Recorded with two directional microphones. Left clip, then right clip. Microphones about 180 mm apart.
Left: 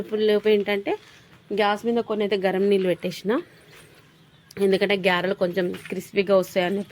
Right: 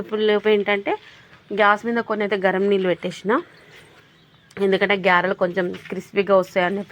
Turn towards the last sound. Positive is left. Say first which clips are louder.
# right 3 dB
turn(degrees=15)  # may be behind; listen again after turning